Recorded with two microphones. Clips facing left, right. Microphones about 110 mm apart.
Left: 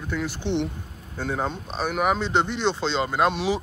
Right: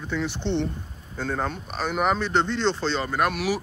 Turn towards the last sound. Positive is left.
turn(degrees=20)  # may be behind; listen again after turning